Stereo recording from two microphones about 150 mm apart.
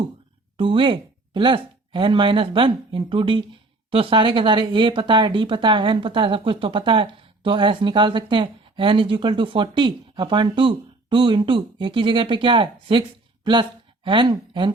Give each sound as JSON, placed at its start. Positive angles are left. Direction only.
{"t": 0.5, "sound": "speech", "side_deg": -35}